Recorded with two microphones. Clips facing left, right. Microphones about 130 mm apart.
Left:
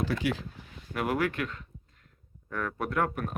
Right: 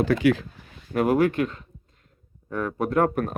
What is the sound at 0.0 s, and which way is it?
Speech, 65° right (ahead or behind).